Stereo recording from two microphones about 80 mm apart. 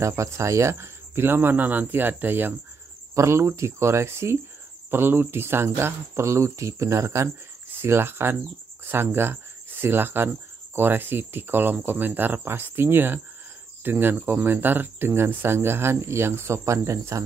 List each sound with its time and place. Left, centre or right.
0.0 s speech: right
3.2 s speech: right